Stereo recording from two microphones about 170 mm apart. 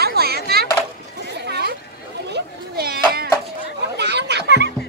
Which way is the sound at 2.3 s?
70° right (ahead or behind).